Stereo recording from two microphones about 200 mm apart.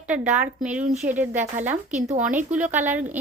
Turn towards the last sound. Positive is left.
turn(degrees=-10)  # may be behind; listen again after turning